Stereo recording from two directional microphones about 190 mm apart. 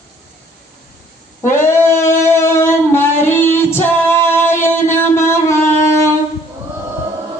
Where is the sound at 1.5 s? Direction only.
15° left (ahead or behind).